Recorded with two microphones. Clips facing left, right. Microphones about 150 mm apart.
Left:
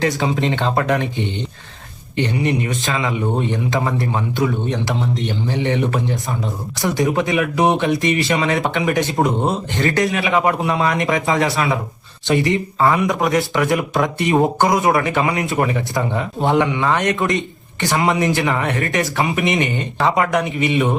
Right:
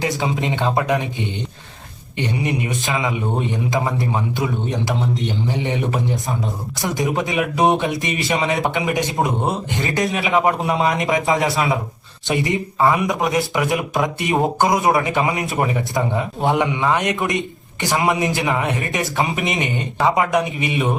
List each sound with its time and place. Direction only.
0.2 s speech: 20° right (ahead or behind)
2.1 s a man's voice: 20° right (ahead or behind)